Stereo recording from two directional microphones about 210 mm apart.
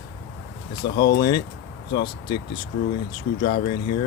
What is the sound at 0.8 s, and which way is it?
Speech, 50° left (ahead or behind).